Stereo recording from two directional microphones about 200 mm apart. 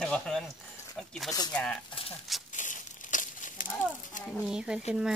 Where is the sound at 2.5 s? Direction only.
40° left (ahead or behind).